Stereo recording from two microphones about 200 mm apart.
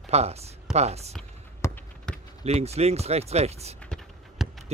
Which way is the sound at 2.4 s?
30° right (ahead or behind).